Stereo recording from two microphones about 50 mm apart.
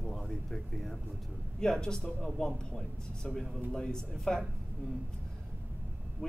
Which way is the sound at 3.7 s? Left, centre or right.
Centre.